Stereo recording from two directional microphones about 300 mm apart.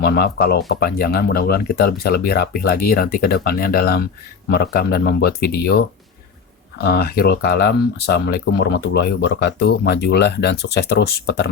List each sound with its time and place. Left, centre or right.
0.0 s speech: left
6.8 s speech: left